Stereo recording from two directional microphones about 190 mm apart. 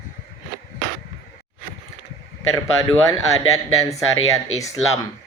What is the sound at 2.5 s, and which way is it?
Speech, 20° left (ahead or behind).